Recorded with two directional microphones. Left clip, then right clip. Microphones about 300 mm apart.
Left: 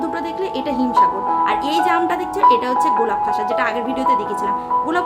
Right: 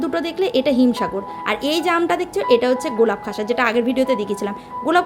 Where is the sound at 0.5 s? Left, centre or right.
Centre.